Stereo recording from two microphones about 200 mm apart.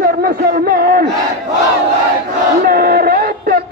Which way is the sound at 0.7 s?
50° right (ahead or behind).